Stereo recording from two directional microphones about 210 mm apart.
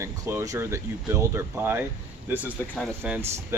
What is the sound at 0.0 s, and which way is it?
Speech, 15° right (ahead or behind).